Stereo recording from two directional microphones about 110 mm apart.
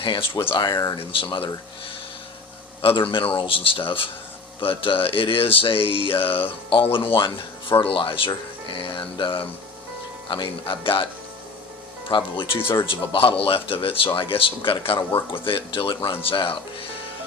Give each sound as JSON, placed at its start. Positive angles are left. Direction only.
{"t": 0.0, "sound": "speech", "side_deg": 50}
{"t": 0.9, "sound": "speech", "side_deg": 50}
{"t": 2.8, "sound": "speech", "side_deg": 55}
{"t": 12.0, "sound": "speech", "side_deg": 50}
{"t": 12.5, "sound": "speech", "side_deg": 20}
{"t": 12.8, "sound": "speech", "side_deg": 50}